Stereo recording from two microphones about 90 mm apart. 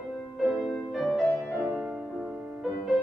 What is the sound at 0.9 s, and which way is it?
Music, 5° right (ahead or behind).